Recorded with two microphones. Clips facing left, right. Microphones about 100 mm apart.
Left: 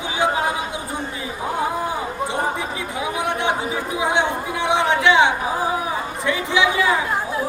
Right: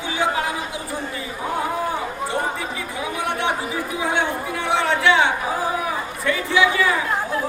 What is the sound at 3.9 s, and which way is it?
Chatter, 20° left (ahead or behind).